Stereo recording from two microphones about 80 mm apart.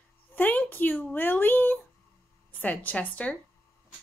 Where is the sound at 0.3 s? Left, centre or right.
Left.